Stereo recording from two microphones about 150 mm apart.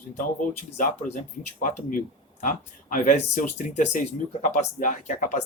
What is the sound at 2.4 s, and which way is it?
Speech, 60° left (ahead or behind).